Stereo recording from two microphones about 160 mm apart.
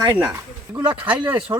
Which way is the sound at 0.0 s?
15° right (ahead or behind).